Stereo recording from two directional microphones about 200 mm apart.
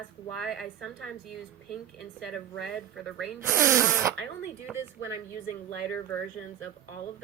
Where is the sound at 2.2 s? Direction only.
Centre (ahead or behind).